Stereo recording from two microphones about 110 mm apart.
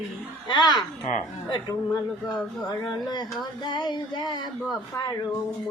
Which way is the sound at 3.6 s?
45° left (ahead or behind).